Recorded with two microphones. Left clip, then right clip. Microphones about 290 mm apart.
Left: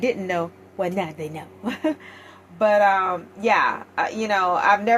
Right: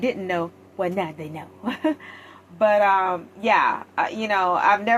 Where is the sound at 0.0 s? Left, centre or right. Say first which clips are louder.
Left 1 dB; left.